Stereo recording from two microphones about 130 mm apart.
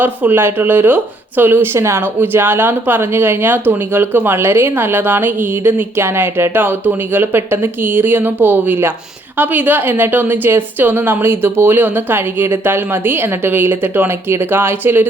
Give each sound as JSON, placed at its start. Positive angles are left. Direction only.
{"t": 0.0, "sound": "speech", "side_deg": -15}